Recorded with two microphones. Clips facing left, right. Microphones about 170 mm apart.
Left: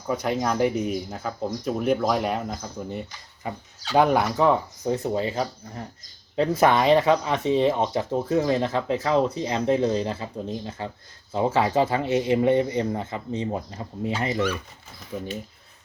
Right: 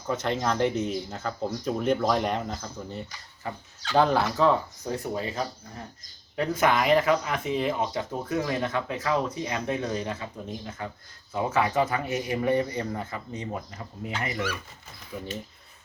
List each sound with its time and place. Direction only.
0.1 s speech: 10° left (ahead or behind); by 14.5 s 25° left (ahead or behind)